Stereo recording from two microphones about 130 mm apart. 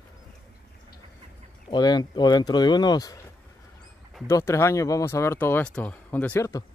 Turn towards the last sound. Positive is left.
turn(degrees=10)  # may be behind; listen again after turning